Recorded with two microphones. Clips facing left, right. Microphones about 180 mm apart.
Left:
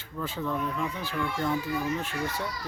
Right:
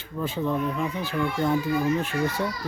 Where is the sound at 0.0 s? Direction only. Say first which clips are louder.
Right 5 dB; 15° right (ahead or behind).